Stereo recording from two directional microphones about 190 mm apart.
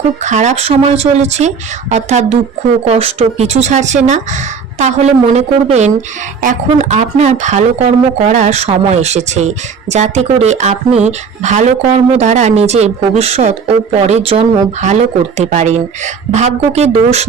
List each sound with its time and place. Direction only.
0.2 s speech: 40° right (ahead or behind)